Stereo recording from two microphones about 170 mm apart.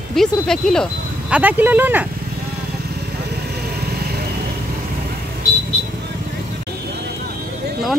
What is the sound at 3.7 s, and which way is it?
Vehicle, 70° right (ahead or behind).